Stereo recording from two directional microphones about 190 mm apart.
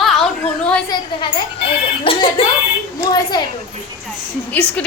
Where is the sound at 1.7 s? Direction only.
30° left (ahead or behind).